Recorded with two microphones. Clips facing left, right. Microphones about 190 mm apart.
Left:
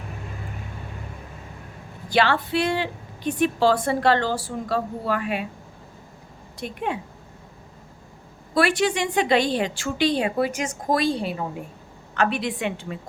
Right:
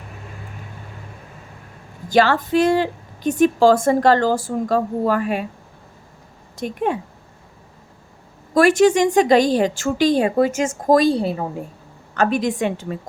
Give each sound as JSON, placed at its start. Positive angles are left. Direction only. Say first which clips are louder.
{"t": 2.0, "sound": "a woman's voice", "louder": "right 5 dB", "side_deg": -45}
{"t": 6.6, "sound": "a woman's voice", "louder": "right 6 dB", "side_deg": -45}
{"t": 8.5, "sound": "a woman's voice", "louder": "right 8 dB", "side_deg": -45}